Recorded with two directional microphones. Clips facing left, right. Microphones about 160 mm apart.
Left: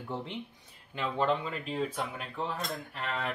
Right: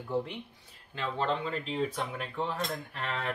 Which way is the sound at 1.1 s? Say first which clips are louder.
Left 1 dB; 10° left (ahead or behind).